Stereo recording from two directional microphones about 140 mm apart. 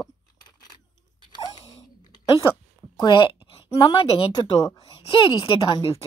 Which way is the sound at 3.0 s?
35° left (ahead or behind).